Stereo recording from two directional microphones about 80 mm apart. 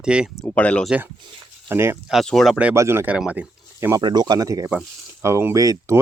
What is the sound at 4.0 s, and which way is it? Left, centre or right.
Speech, right.